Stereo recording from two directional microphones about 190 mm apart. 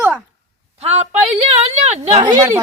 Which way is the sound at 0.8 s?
35° right (ahead or behind).